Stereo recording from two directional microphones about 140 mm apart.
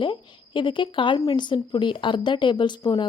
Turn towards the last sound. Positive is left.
turn(degrees=30)  # may be behind; listen again after turning